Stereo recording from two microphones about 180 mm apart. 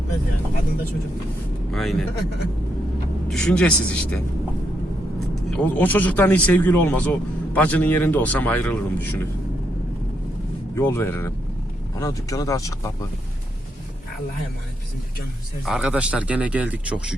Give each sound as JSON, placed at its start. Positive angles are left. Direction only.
{"t": 1.7, "sound": "a man's voice", "side_deg": 0}
{"t": 3.2, "sound": "a man's voice", "side_deg": 5}
{"t": 5.3, "sound": "speech", "side_deg": 5}
{"t": 10.8, "sound": "speech", "side_deg": 15}
{"t": 15.6, "sound": "speech", "side_deg": -5}